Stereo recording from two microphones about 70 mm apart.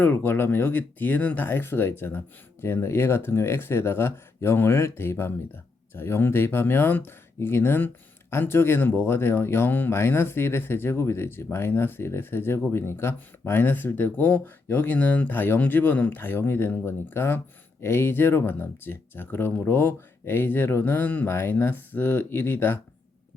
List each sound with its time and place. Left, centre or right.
0.0 s speech: left